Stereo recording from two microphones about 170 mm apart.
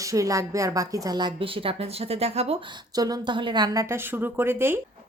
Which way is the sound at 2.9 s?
20° right (ahead or behind).